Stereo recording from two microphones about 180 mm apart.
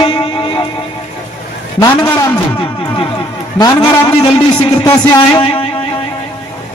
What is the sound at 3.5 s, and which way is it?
A man's voice, 25° left (ahead or behind).